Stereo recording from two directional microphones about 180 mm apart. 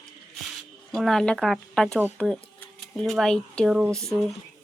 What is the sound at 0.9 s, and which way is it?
Speech, centre (ahead or behind).